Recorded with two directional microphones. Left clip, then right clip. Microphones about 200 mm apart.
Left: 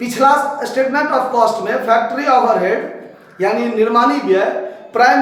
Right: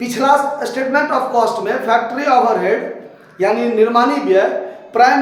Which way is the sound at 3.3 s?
20° right (ahead or behind).